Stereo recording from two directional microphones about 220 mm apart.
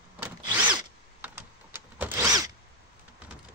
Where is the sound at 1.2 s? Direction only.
10° right (ahead or behind).